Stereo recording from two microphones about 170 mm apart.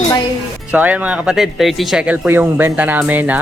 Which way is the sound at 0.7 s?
10° right (ahead or behind).